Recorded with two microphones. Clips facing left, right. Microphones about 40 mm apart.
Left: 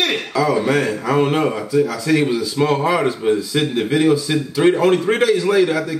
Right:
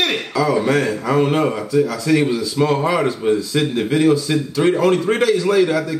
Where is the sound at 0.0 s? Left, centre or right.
Centre.